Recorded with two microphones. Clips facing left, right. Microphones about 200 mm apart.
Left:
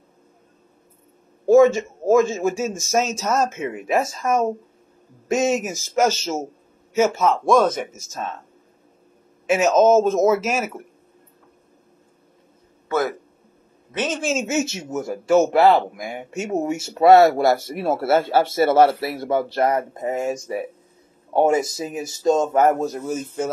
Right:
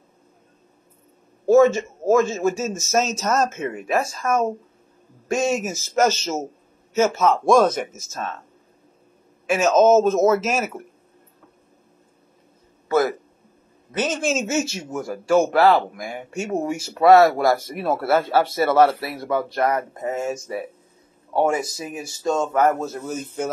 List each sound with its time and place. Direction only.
1.5 s a man's voice: 15° left (ahead or behind)
7.2 s speech: centre (ahead or behind)
8.1 s speech: 20° left (ahead or behind)
9.5 s speech: 15° left (ahead or behind)
12.8 s a sound: 5° right (ahead or behind)
13.9 s speech: centre (ahead or behind)
14.4 s speech: 20° left (ahead or behind)